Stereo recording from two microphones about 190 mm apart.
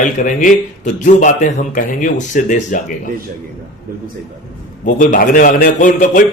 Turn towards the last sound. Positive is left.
turn(degrees=40)  # may be behind; listen again after turning